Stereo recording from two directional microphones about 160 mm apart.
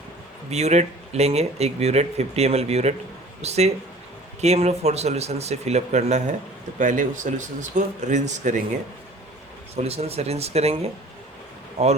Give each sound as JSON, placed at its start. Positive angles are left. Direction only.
{"t": 0.5, "sound": "speech", "side_deg": -45}
{"t": 9.7, "sound": "speech", "side_deg": -40}